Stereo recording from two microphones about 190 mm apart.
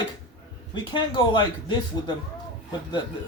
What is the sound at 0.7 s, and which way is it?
Speech, 25° left (ahead or behind).